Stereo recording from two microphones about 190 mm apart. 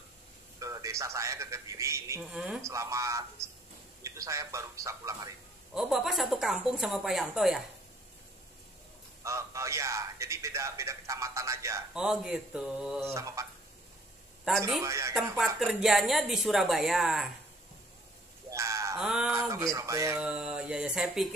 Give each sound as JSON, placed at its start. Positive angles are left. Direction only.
{"t": 0.6, "sound": "a man's voice", "side_deg": -15}
{"t": 2.3, "sound": "speech", "side_deg": -5}
{"t": 2.6, "sound": "a man's voice", "side_deg": -15}
{"t": 5.8, "sound": "speech", "side_deg": 0}
{"t": 9.2, "sound": "a man's voice", "side_deg": -15}
{"t": 11.9, "sound": "speech", "side_deg": -5}
{"t": 13.1, "sound": "a man's voice", "side_deg": -15}
{"t": 14.8, "sound": "a man's voice", "side_deg": -15}
{"t": 15.3, "sound": "speech", "side_deg": 0}
{"t": 18.5, "sound": "a sound", "side_deg": -15}
{"t": 18.9, "sound": "speech", "side_deg": -5}
{"t": 19.3, "sound": "a man's voice", "side_deg": -15}
{"t": 20.2, "sound": "speech", "side_deg": -5}